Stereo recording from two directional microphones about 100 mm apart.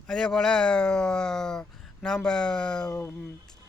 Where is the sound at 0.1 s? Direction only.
5° left (ahead or behind).